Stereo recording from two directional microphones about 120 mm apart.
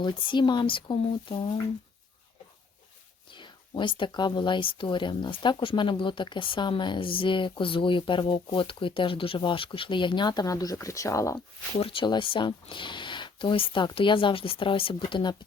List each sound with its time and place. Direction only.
0.0 s speech: 40° left (ahead or behind)
3.2 s speech: 40° left (ahead or behind); by 11.3 s 25° left (ahead or behind)
11.8 s speech: 45° left (ahead or behind)